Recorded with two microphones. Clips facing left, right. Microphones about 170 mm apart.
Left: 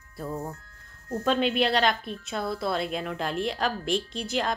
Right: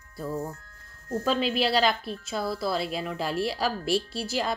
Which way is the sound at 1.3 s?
5° right (ahead or behind).